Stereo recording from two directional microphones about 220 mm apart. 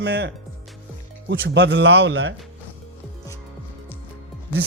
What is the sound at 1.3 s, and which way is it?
A man's voice, 50° right (ahead or behind).